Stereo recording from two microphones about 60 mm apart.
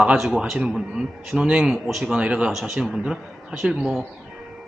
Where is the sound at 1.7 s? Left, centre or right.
Centre.